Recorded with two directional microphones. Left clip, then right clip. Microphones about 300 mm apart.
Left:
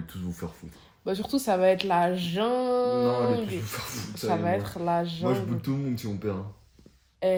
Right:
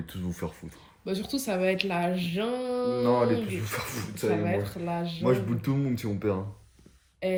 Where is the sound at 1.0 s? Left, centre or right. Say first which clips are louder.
Left 3 dB; centre.